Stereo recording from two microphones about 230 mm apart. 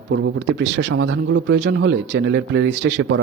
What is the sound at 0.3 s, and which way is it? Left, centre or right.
A man's voice, right.